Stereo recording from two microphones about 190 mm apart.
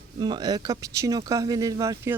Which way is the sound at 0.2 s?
20° right (ahead or behind).